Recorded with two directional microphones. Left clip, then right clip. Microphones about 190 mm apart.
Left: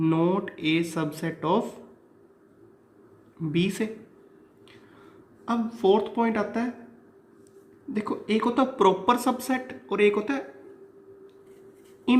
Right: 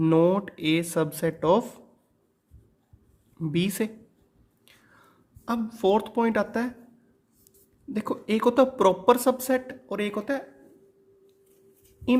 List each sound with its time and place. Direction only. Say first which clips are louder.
0.0 s a woman's voice: right 3 dB; 50° right (ahead or behind)
3.5 s a woman's voice: left 1 dB; 55° right (ahead or behind)
5.5 s a woman's voice: left 1 dB; 55° right (ahead or behind)
7.9 s a woman's voice: even; 55° right (ahead or behind)